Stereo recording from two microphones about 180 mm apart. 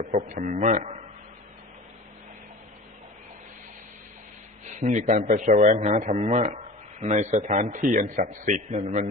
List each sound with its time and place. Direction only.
0.3 s a man's voice: 45° right (ahead or behind)
4.6 s a man's voice: 40° right (ahead or behind)